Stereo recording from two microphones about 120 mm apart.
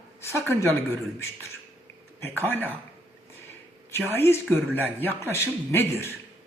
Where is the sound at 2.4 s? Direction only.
15° left (ahead or behind).